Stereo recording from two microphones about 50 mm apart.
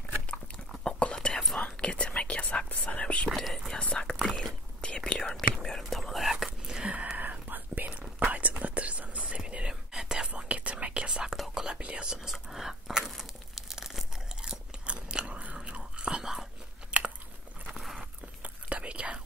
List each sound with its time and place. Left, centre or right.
0.8 s whispering: centre
3.3 s whispering: centre
3.9 s whispering: centre
6.4 s whispering: centre
7.2 s whispering: right; by 10.3 s centre
10.3 s whispering: right; by 13.1 s centre
13.2 s crunch: centre
16.9 s biting: right
17.6 s a sound: centre
17.9 s whispering: right